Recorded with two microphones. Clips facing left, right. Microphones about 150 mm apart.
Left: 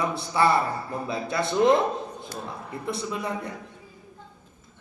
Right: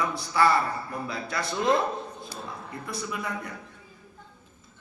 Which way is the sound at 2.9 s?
25° left (ahead or behind).